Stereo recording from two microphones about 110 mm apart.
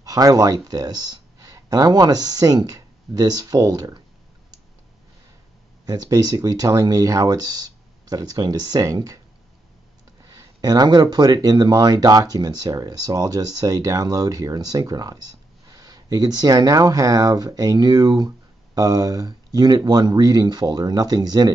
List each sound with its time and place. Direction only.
0.0 s speech: 35° right (ahead or behind)
5.9 s speech: 35° right (ahead or behind)
10.3 s speech: 35° right (ahead or behind)